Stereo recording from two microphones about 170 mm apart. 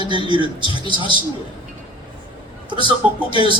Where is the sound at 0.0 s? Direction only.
30° right (ahead or behind).